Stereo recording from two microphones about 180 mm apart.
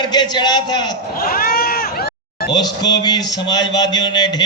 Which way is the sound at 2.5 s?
25° left (ahead or behind).